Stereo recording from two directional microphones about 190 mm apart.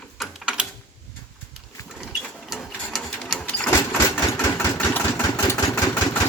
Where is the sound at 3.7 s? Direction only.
15° left (ahead or behind).